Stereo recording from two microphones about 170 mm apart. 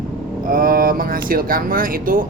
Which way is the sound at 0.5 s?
60° right (ahead or behind).